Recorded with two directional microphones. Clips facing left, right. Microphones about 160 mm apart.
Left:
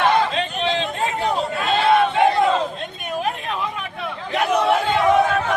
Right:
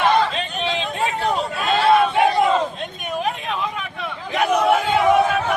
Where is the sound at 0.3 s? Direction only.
5° right (ahead or behind).